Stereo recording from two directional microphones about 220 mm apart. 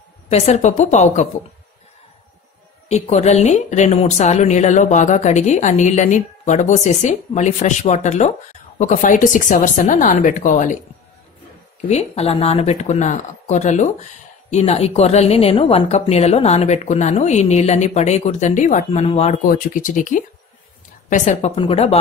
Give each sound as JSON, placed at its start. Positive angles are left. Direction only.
{"t": 0.3, "sound": "a woman's voice", "side_deg": 30}
{"t": 2.9, "sound": "a woman's voice", "side_deg": 30}
{"t": 11.9, "sound": "a woman's voice", "side_deg": 30}